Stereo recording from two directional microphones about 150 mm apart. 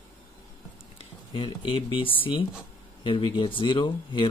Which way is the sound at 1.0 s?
35° left (ahead or behind).